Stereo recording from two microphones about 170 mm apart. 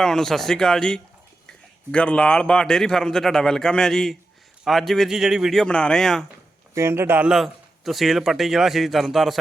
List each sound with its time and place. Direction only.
0.0 s a man's voice: centre (ahead or behind)
6.7 s a man's voice: 15° right (ahead or behind)